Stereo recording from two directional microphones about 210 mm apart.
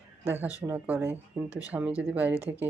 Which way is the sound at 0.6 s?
10° right (ahead or behind).